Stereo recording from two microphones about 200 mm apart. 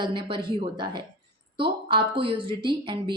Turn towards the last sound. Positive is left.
turn(degrees=-25)  # may be behind; listen again after turning